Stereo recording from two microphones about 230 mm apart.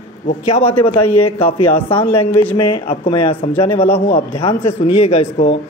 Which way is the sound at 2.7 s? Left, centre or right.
Left.